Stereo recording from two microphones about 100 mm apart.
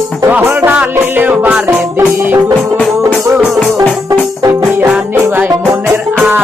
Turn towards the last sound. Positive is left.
turn(degrees=-25)  # may be behind; listen again after turning